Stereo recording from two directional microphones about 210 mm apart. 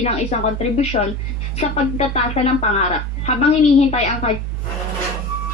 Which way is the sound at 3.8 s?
30° left (ahead or behind).